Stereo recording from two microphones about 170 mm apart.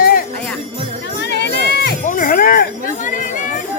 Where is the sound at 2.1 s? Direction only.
55° left (ahead or behind).